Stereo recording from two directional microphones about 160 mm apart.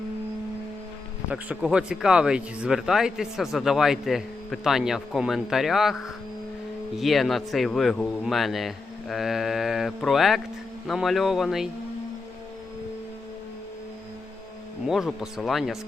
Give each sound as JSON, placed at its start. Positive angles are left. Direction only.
{"t": 1.3, "sound": "speech", "side_deg": -5}
{"t": 14.8, "sound": "speech", "side_deg": 0}